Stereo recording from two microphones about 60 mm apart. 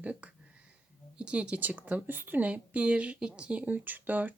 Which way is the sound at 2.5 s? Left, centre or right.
Centre.